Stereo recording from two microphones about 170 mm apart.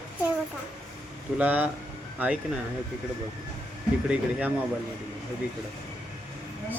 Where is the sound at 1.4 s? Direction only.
10° right (ahead or behind).